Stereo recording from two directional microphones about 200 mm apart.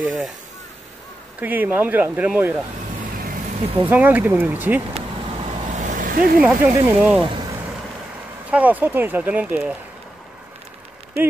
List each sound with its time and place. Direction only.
0.0 s speech: centre (ahead or behind)
1.4 s speech: 10° right (ahead or behind)
3.8 s speech: 10° right (ahead or behind)
4.9 s vehicle: 35° right (ahead or behind)
6.4 s speech: 5° right (ahead or behind)
8.5 s speech: 10° right (ahead or behind)